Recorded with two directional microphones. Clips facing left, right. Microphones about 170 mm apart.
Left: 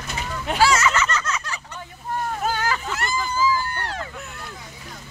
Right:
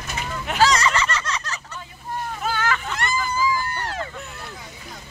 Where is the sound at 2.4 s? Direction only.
40° left (ahead or behind).